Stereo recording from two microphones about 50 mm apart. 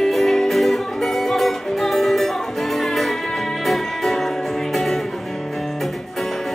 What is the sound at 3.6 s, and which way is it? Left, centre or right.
Music, centre.